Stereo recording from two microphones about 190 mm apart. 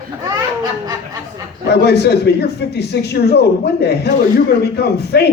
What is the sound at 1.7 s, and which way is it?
A man's voice, 60° left (ahead or behind).